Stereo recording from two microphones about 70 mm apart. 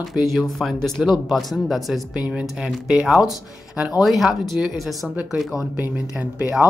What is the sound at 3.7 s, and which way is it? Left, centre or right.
Speech, centre.